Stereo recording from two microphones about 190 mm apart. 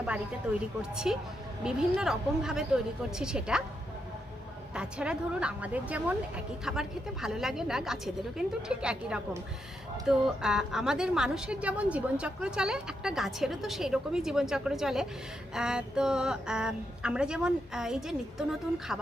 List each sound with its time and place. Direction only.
0.5 s a woman's voice: 5° right (ahead or behind)
4.7 s a woman's voice: 5° right (ahead or behind)